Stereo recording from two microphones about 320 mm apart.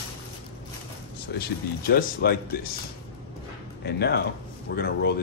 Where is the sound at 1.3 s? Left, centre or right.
Left.